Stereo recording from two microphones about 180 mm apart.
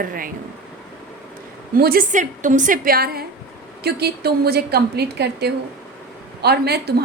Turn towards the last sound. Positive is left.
turn(degrees=-65)  # may be behind; listen again after turning